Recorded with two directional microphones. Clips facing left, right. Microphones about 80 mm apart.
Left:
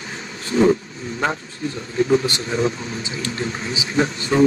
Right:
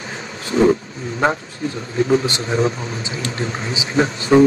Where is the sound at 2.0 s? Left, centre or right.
Right.